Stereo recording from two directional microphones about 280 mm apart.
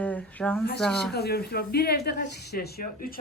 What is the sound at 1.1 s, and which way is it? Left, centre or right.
Speech, left.